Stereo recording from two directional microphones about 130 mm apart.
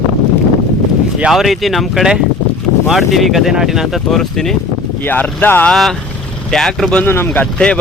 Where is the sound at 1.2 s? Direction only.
5° right (ahead or behind).